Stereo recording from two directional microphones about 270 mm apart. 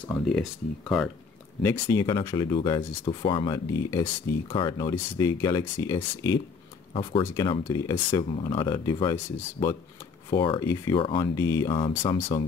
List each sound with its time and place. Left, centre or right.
0.0 s speech: centre